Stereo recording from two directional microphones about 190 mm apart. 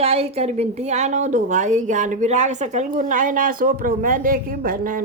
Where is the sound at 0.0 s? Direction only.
30° right (ahead or behind).